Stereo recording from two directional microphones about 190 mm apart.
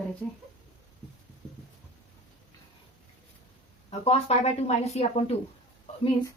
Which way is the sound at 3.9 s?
35° left (ahead or behind).